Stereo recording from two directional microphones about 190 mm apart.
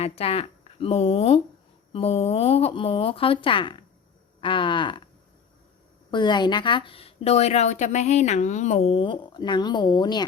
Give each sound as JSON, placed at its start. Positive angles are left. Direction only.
{"t": 0.0, "sound": "a woman's voice", "side_deg": 30}
{"t": 4.4, "sound": "cattle", "side_deg": 25}
{"t": 6.1, "sound": "a woman's voice", "side_deg": 25}